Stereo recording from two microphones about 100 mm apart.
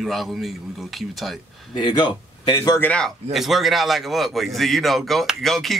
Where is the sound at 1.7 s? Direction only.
50° left (ahead or behind).